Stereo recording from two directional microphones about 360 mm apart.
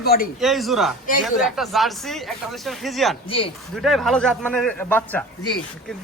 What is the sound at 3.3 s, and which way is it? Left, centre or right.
Speech, centre.